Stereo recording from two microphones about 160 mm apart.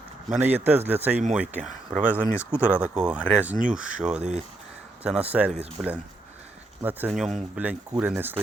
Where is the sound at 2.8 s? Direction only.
5° right (ahead or behind).